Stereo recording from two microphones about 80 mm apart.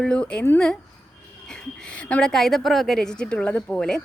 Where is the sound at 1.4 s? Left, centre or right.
Centre.